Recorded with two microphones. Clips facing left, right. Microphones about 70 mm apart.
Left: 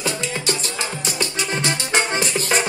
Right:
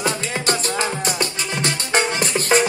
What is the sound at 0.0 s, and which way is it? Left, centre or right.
Music, right.